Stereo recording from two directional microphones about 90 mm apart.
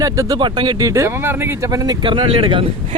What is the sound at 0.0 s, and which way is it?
Vehicle, 40° right (ahead or behind).